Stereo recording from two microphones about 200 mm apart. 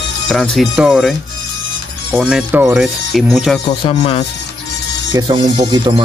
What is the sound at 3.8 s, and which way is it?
Speech, 30° left (ahead or behind).